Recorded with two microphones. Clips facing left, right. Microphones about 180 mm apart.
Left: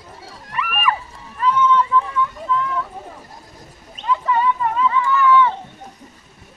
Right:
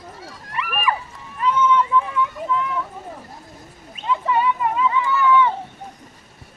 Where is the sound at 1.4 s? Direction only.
20° right (ahead or behind).